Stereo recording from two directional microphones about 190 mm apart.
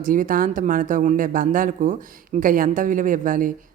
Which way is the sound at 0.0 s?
45° right (ahead or behind).